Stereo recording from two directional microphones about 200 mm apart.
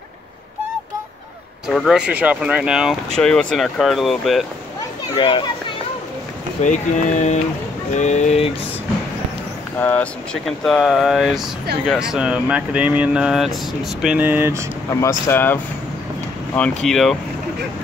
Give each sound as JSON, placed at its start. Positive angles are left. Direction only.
{"t": 1.7, "sound": "speech", "side_deg": 0}
{"t": 5.1, "sound": "speech", "side_deg": 25}
{"t": 6.6, "sound": "speech", "side_deg": 35}
{"t": 9.8, "sound": "speech", "side_deg": 10}
{"t": 15.0, "sound": "speech", "side_deg": 15}